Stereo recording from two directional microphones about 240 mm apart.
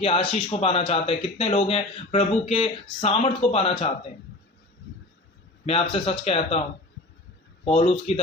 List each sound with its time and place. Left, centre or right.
0.0 s speech: left
5.6 s speech: left
7.8 s speech: left